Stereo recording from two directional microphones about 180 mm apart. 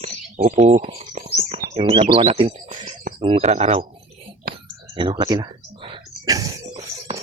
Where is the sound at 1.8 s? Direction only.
30° right (ahead or behind).